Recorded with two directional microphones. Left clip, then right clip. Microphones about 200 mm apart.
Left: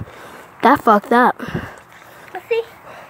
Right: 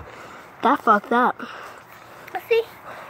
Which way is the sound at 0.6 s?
20° left (ahead or behind).